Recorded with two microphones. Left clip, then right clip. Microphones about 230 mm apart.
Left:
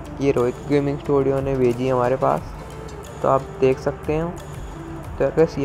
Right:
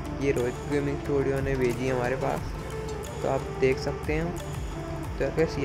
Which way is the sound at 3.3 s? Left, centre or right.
Centre.